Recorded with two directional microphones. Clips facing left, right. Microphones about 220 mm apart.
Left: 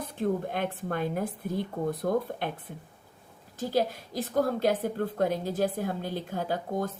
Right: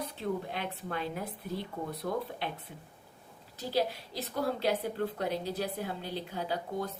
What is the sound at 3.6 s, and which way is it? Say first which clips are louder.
A woman's voice: left 4 dB; 50° left (ahead or behind).